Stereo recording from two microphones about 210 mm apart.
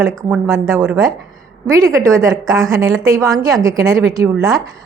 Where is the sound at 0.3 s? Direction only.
10° right (ahead or behind).